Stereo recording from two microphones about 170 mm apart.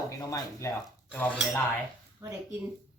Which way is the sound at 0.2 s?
20° left (ahead or behind).